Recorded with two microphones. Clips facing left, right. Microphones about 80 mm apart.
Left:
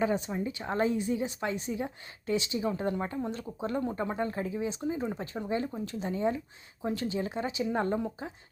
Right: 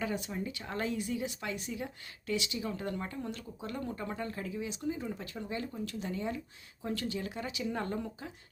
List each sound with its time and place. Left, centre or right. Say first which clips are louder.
0.0 s a woman's voice: left 6 dB; left